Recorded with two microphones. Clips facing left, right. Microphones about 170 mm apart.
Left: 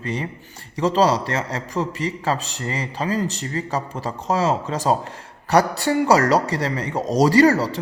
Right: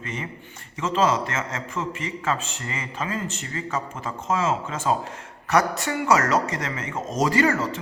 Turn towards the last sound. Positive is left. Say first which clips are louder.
# left 6 dB
turn(degrees=35)  # may be behind; listen again after turning